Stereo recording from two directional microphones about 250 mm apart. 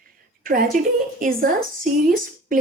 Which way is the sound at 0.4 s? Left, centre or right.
Right.